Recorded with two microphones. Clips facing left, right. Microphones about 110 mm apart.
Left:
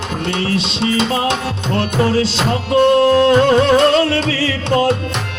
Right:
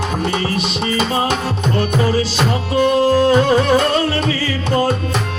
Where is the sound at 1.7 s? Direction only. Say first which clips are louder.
Left 2 dB; 80° left.